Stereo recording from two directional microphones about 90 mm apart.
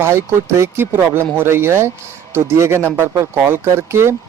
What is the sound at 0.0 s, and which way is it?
Speech, 30° right (ahead or behind).